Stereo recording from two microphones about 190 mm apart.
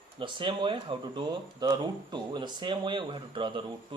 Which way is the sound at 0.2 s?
25° right (ahead or behind).